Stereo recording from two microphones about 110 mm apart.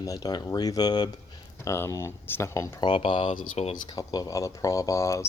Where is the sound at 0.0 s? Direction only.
35° left (ahead or behind).